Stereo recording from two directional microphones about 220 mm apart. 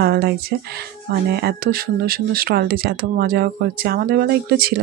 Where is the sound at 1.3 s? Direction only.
45° right (ahead or behind).